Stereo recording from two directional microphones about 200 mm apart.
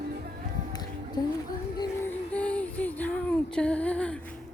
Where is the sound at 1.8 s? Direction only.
10° left (ahead or behind).